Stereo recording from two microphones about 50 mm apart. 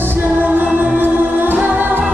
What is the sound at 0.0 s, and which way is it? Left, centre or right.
Music, right.